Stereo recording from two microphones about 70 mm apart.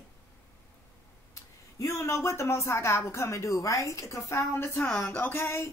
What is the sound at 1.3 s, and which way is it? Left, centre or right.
A child's voice, left.